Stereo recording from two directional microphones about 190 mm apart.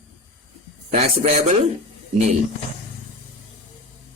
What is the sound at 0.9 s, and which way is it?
Speech, 35° right (ahead or behind).